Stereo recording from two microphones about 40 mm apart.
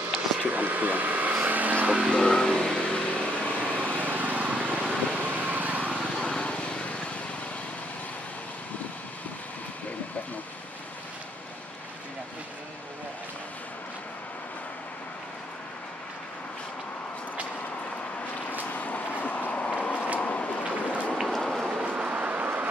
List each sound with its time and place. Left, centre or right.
0.4 s vehicle: right
2.0 s vehicle: centre; by 3.7 s left
3.7 s vehicle: right
6.2 s vehicle: left
18.5 s a sound: left
20.2 s vehicle: left
21.3 s train: centre
21.8 s vehicle: right
22.4 s a sound: right